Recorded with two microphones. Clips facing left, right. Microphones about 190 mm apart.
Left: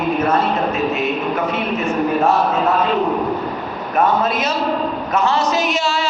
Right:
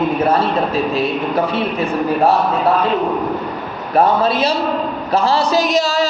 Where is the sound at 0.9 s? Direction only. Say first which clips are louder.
Right 2 dB; 35° right (ahead or behind).